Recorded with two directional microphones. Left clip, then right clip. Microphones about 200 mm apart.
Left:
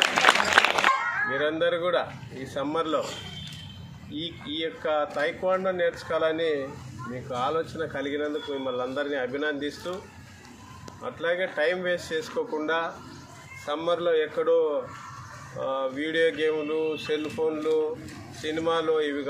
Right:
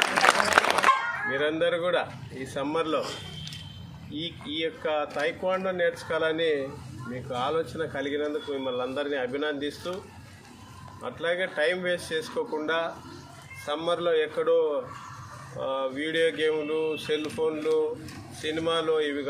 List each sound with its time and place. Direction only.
0.0 s run: 50° right (ahead or behind)
1.3 s a man's voice: centre (ahead or behind)
4.1 s a man's voice: centre (ahead or behind)
11.0 s a man's voice: centre (ahead or behind)